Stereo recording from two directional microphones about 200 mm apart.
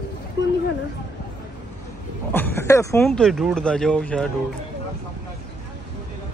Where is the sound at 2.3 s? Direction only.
10° left (ahead or behind).